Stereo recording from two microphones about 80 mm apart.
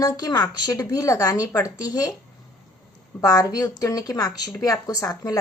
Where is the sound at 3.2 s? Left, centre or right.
Left.